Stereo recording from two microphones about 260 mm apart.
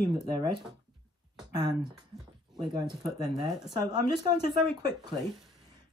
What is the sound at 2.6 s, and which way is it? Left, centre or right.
Speech, centre.